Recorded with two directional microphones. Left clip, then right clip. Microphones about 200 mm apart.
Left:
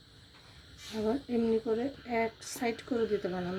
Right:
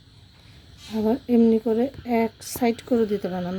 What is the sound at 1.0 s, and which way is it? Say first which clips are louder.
A woman's voice: right 11 dB; 55° right (ahead or behind).